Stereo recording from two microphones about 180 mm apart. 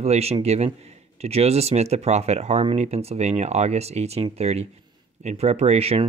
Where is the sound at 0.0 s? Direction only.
35° right (ahead or behind).